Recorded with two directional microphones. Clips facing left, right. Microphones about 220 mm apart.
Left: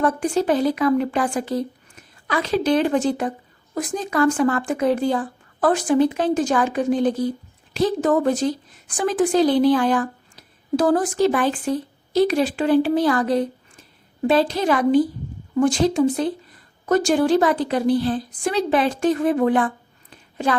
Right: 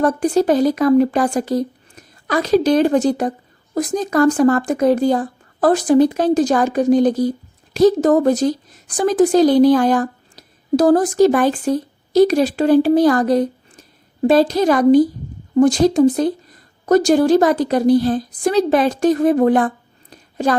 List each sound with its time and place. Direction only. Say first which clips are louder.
0.0 s a woman's voice: right 5 dB; 40° right (ahead or behind)